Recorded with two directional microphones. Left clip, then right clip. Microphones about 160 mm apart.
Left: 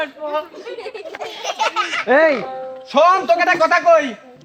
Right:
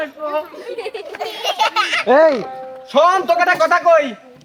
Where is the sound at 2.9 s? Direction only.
35° right (ahead or behind).